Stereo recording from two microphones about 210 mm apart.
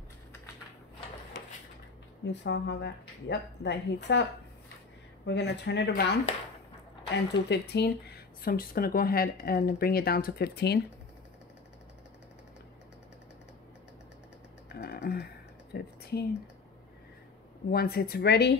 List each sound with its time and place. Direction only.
2.2 s speech: 55° left (ahead or behind)
7.3 s speech: 55° left (ahead or behind)
14.7 s a sound: 50° left (ahead or behind)
17.6 s speech: 50° left (ahead or behind)